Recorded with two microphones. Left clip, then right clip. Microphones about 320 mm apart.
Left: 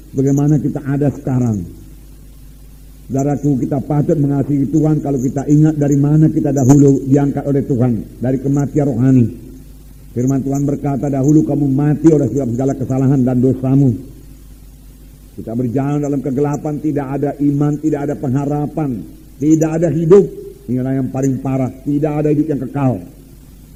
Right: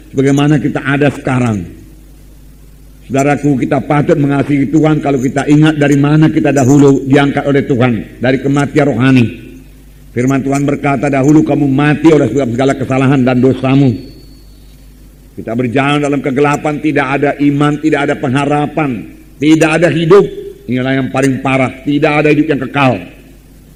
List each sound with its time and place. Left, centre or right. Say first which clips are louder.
0.2 s a man's voice: right 5 dB; right
3.1 s a man's voice: right 6 dB; right
15.4 s a man's voice: right 7 dB; right